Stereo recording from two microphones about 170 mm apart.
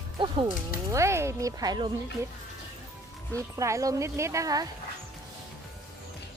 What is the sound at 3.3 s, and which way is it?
Speech, 20° right (ahead or behind).